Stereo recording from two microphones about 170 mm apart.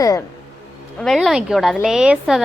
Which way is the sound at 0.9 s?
Centre (ahead or behind).